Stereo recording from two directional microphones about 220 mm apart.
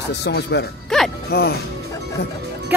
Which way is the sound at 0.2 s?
50° left (ahead or behind).